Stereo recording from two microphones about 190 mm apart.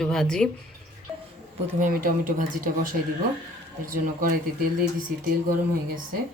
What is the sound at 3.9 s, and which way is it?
Speech, 45° right (ahead or behind).